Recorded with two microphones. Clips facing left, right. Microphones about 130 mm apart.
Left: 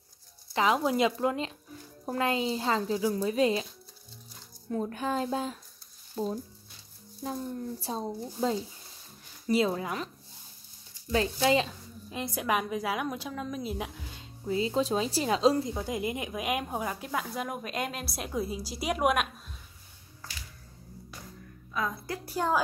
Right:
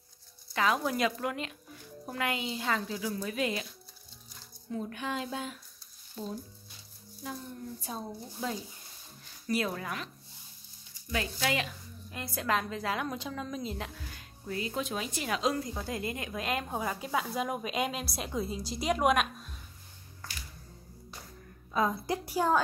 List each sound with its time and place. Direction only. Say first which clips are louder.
0.5 s a woman's voice: left 3 dB; 20° left (ahead or behind)
4.6 s a woman's voice: left 5 dB; 40° left (ahead or behind); by 9.9 s 25° left (ahead or behind)
11.1 s a woman's voice: left 7 dB; 30° left (ahead or behind)
15.7 s a woman's voice: left 4 dB; 15° left (ahead or behind)
21.7 s a woman's voice: right 4 dB; 25° right (ahead or behind)